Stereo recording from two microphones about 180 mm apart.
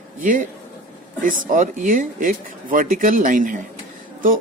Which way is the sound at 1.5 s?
45° right (ahead or behind).